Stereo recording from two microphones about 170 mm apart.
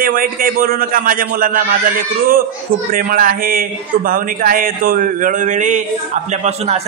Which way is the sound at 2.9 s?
55° right (ahead or behind).